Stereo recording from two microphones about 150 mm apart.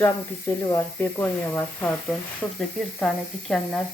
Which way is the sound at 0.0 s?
15° left (ahead or behind).